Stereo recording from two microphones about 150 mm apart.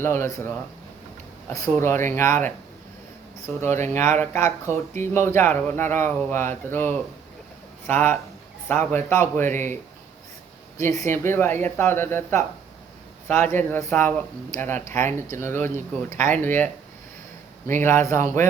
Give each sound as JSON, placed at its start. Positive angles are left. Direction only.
{"t": 0.0, "sound": "speech", "side_deg": 15}
{"t": 10.8, "sound": "speech", "side_deg": 20}
{"t": 17.7, "sound": "speech", "side_deg": 15}